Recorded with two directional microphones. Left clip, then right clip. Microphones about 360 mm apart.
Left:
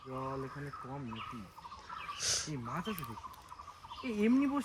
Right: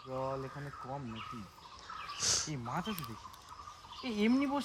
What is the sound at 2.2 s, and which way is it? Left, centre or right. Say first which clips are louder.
Speech: right 3 dB; centre.